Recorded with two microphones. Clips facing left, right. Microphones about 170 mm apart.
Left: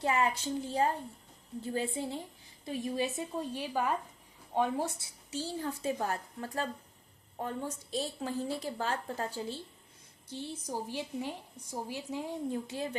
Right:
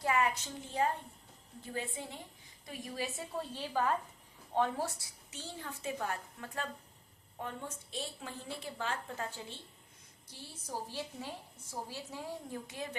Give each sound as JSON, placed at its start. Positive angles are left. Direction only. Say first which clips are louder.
{"t": 0.0, "sound": "a woman's voice", "louder": "left 2 dB", "side_deg": 30}
{"t": 5.3, "sound": "a woman's voice", "louder": "left 9 dB", "side_deg": 35}
{"t": 10.7, "sound": "a woman's voice", "louder": "left 2 dB", "side_deg": 15}
{"t": 12.6, "sound": "a woman's voice", "louder": "left 6 dB", "side_deg": 30}